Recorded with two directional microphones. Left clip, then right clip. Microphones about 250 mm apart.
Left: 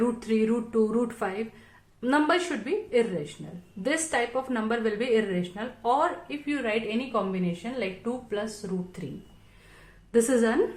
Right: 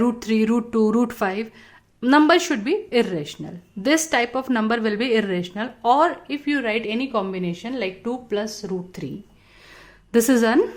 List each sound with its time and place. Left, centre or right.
0.0 s a woman's voice: right
10.1 s a woman's voice: right